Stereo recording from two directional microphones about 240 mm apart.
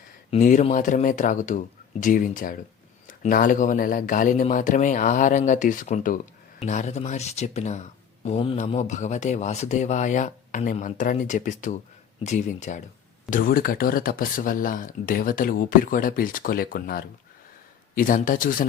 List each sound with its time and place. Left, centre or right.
0.3 s speech: left